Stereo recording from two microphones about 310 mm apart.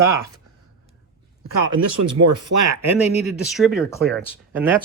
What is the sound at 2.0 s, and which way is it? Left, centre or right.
Speech, right.